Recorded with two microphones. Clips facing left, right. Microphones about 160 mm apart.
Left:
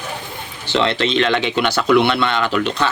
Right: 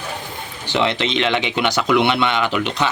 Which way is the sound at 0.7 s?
15° right (ahead or behind).